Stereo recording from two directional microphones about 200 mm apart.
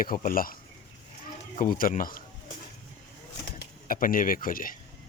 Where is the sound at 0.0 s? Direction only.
45° left (ahead or behind).